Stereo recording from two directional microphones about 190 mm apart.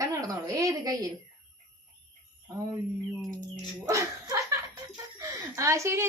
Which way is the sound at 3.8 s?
15° right (ahead or behind).